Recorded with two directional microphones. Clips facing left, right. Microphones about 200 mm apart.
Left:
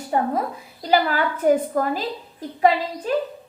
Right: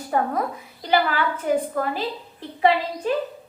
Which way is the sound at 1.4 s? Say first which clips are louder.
Left 6 dB; 40° left (ahead or behind).